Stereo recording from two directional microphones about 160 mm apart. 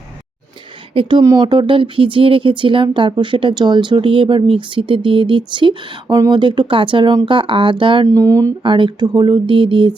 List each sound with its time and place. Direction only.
1.2 s speech: 20° right (ahead or behind)
1.5 s speech: 30° right (ahead or behind)
8.0 s speech: 20° right (ahead or behind)